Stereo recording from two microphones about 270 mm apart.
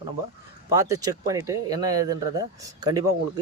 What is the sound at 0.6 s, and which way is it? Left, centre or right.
Speech, centre.